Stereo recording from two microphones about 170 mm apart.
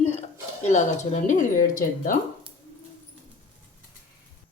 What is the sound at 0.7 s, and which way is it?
Speech, 45° left (ahead or behind).